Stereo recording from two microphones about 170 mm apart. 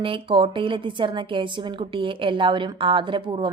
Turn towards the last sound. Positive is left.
turn(degrees=-30)  # may be behind; listen again after turning